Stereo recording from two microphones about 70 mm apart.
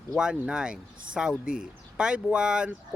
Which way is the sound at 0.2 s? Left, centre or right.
Centre.